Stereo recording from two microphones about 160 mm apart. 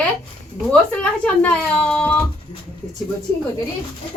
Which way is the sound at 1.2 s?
10° left (ahead or behind).